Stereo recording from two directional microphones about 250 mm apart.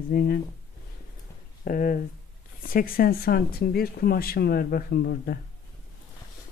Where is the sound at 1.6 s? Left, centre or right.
Left.